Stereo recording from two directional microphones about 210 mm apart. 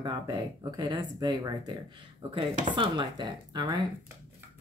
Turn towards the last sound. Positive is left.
turn(degrees=-20)  # may be behind; listen again after turning